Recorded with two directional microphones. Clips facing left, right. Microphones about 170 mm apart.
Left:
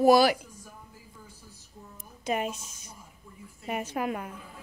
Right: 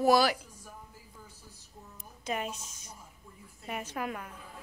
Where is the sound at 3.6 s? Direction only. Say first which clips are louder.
Left 5 dB; 15° left (ahead or behind).